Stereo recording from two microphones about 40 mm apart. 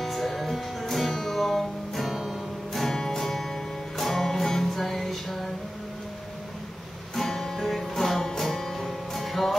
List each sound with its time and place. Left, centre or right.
0.0 s music: centre
7.2 s music: centre